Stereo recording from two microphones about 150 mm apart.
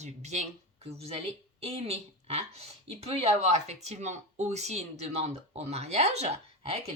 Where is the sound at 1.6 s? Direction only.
45° right (ahead or behind).